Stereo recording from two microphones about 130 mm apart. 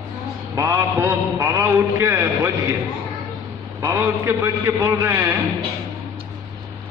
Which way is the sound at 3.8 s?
15° right (ahead or behind).